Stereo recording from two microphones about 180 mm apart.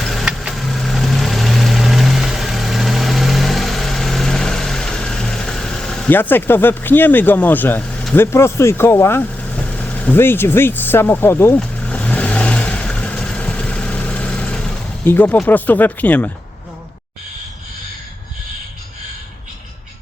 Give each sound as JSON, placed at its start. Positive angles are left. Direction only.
{"t": 0.0, "sound": "vehicle", "side_deg": 0}